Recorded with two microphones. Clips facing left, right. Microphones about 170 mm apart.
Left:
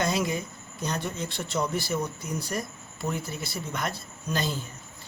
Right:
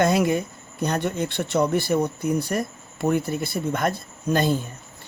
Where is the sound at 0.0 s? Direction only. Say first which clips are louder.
Right 7 dB; 60° right (ahead or behind).